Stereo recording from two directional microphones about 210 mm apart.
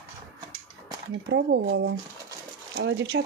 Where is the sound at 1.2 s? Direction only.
60° right (ahead or behind).